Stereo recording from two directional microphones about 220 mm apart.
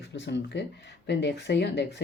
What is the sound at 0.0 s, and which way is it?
Speech, 50° left (ahead or behind).